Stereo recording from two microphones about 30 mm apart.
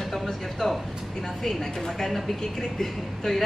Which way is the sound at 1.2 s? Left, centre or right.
Centre.